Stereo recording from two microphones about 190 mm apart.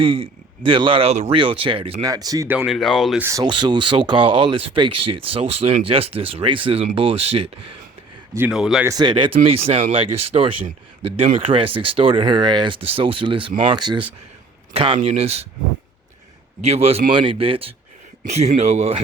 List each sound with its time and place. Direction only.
0.0 s speech: 30° right (ahead or behind)
2.6 s speech: centre (ahead or behind)
3.2 s speech: 15° right (ahead or behind); by 7.4 s 30° right (ahead or behind)
8.4 s speech: centre (ahead or behind)
8.9 s speech: 25° right (ahead or behind)
16.6 s speech: 30° right (ahead or behind)